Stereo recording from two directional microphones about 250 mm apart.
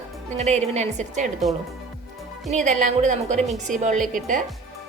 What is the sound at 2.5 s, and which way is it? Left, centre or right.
A woman's voice, right.